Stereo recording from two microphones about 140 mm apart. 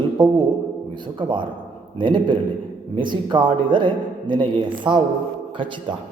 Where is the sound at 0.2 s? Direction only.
35° right (ahead or behind).